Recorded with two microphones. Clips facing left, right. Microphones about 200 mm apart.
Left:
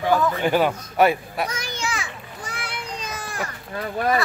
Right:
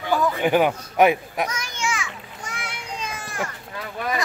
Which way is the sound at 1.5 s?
35° left (ahead or behind).